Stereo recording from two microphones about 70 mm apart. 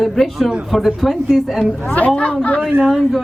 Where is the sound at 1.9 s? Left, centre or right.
Centre.